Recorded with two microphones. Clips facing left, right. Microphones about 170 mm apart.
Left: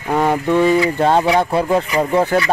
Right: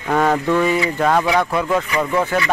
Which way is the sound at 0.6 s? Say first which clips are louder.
Left 4 dB; 30° left (ahead or behind).